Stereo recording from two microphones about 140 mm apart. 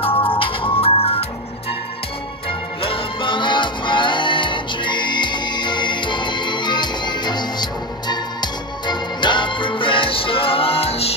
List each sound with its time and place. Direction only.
0.0 s music: 40° left (ahead or behind)
2.8 s music: 40° left (ahead or behind)